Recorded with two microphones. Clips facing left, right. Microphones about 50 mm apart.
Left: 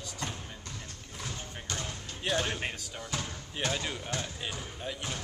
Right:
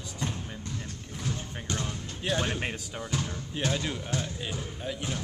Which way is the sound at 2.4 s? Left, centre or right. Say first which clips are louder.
Right 2 dB; centre.